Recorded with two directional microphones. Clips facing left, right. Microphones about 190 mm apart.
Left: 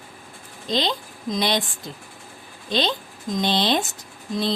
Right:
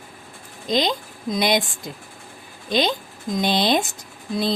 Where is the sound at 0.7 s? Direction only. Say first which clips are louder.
Right 3 dB; 15° right (ahead or behind).